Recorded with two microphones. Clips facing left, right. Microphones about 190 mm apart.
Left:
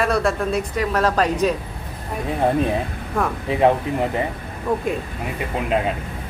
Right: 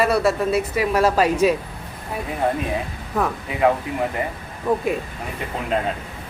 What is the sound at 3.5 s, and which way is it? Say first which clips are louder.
Speech: left 5 dB; 30° left (ahead or behind).